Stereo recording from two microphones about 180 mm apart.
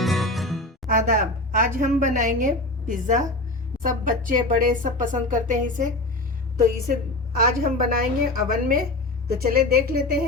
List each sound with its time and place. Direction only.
0.0 s music: centre (ahead or behind)
0.9 s a woman's voice: 50° right (ahead or behind)
7.3 s a woman's voice: 55° right (ahead or behind)